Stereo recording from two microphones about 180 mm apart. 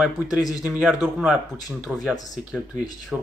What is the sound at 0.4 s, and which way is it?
Speech, 20° left (ahead or behind).